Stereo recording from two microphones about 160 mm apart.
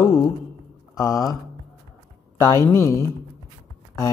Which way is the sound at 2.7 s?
15° left (ahead or behind).